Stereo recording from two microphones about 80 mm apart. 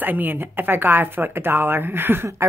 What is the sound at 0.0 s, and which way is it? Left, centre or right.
Speech, right.